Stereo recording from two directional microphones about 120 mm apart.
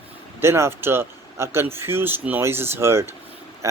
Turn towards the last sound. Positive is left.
turn(degrees=-25)  # may be behind; listen again after turning